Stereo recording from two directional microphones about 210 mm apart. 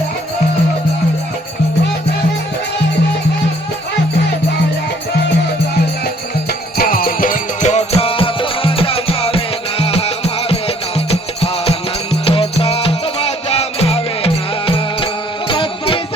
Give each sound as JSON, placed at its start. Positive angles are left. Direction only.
{"t": 6.7, "sound": "music", "side_deg": 45}